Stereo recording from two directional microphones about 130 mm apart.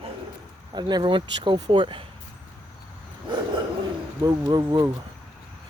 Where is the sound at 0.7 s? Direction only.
35° right (ahead or behind).